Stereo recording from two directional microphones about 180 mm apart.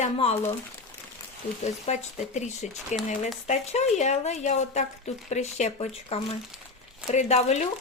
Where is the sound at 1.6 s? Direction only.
40° left (ahead or behind).